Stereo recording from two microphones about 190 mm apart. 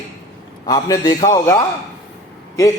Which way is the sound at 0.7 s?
20° left (ahead or behind).